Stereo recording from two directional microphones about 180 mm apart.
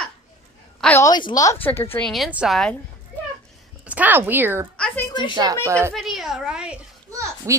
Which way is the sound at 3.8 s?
10° right (ahead or behind).